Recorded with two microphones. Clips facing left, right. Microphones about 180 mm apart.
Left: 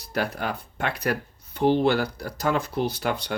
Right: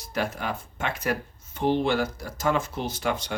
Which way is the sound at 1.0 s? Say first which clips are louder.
Left 1 dB; 65° left (ahead or behind).